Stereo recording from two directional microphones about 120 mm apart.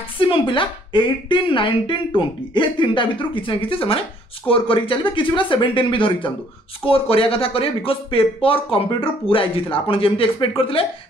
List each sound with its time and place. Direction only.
0.5 s speech: 45° left (ahead or behind)